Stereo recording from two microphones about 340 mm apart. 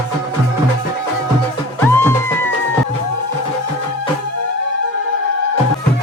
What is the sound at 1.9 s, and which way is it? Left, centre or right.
Music, centre.